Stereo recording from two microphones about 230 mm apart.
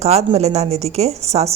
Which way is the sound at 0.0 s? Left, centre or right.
Right.